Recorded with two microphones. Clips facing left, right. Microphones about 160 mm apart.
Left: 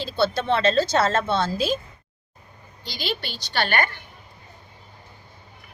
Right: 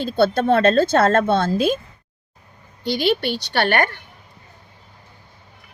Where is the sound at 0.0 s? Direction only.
50° right (ahead or behind).